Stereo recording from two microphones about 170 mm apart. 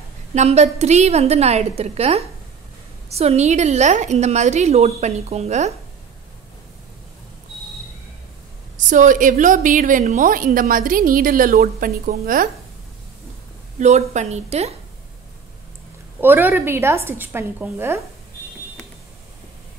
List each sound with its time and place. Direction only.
0.3 s a woman's voice: 40° right (ahead or behind)
8.8 s a woman's voice: 50° right (ahead or behind)
13.7 s a woman's voice: 45° right (ahead or behind)
16.2 s a woman's voice: 10° right (ahead or behind)